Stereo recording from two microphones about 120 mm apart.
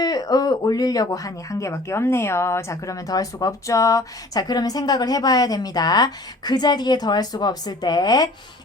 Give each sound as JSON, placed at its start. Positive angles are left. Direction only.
{"t": 0.0, "sound": "speech", "side_deg": 35}